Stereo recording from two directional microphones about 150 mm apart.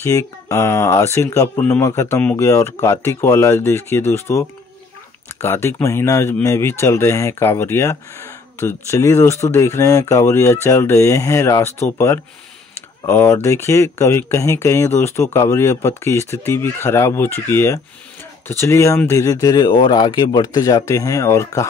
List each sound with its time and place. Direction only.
0.0 s speech: 20° left (ahead or behind)